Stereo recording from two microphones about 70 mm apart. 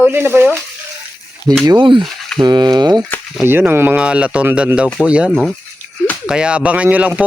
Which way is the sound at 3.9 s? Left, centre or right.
Centre.